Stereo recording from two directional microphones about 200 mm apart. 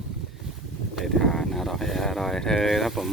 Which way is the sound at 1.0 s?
Centre (ahead or behind).